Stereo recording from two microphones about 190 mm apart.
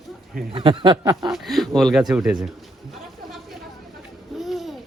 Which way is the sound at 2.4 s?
Centre (ahead or behind).